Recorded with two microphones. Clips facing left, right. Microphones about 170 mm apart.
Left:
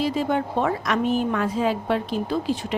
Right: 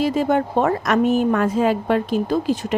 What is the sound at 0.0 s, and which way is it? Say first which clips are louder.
A woman's voice: right 4 dB; 50° right (ahead or behind).